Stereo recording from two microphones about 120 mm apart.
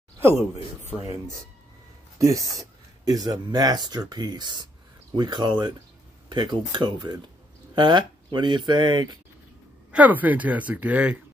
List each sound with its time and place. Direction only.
0.2 s speech: 25° right (ahead or behind)
2.1 s speech: 30° right (ahead or behind)
9.8 s speech: 10° right (ahead or behind)